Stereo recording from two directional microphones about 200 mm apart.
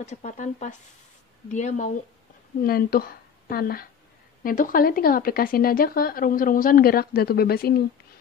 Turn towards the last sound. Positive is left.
turn(degrees=50)  # may be behind; listen again after turning